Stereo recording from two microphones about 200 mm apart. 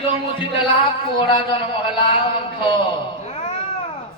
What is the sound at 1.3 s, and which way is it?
Speech, 25° left (ahead or behind).